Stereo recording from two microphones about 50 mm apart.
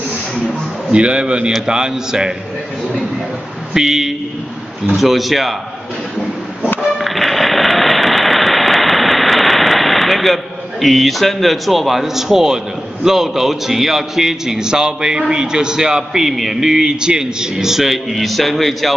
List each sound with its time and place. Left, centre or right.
0.9 s a man's voice: right
3.7 s a man's voice: centre
7.0 s a sound: centre
13.0 s a man's voice: centre